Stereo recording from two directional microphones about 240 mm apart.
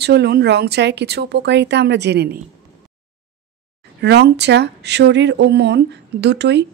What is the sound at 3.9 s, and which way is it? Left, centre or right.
Speech, right.